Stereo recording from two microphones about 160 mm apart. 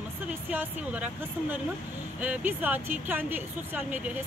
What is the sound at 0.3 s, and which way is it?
Speech, 10° right (ahead or behind).